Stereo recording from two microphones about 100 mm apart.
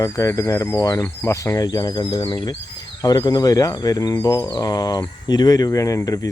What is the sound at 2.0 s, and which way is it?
Speech, 60° left (ahead or behind).